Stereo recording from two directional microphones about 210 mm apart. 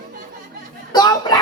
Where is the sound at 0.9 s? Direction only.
20° left (ahead or behind).